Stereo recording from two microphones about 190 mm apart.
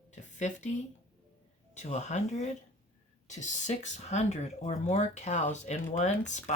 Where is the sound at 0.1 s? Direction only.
40° left (ahead or behind).